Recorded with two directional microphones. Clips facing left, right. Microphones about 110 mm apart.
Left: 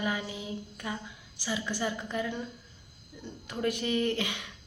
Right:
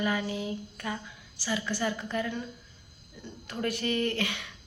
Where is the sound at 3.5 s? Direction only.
15° left (ahead or behind).